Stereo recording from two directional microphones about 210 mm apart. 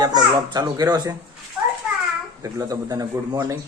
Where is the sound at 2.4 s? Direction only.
15° right (ahead or behind).